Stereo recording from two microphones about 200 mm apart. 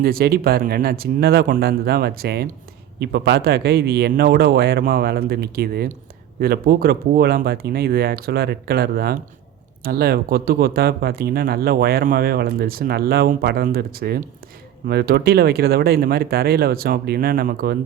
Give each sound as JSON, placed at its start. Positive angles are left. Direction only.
{"t": 0.0, "sound": "speech", "side_deg": -50}